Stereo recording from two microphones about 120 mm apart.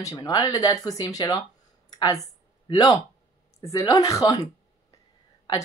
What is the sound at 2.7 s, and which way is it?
Speech, 30° left (ahead or behind).